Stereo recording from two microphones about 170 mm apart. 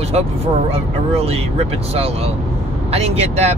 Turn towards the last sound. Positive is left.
turn(degrees=-40)  # may be behind; listen again after turning